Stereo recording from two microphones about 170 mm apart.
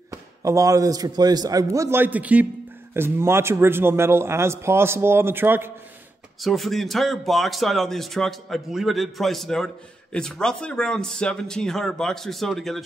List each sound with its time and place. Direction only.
0.4 s a man's voice: 20° right (ahead or behind)
6.4 s speech: centre (ahead or behind)